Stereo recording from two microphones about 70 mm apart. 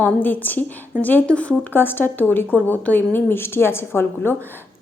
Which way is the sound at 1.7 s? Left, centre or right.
Left.